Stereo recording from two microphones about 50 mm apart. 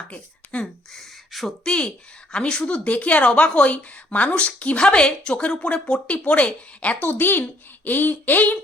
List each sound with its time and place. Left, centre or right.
0.1 s speech: left
0.9 s beatboxing: centre
1.6 s a woman's voice: left
7.0 s speech: left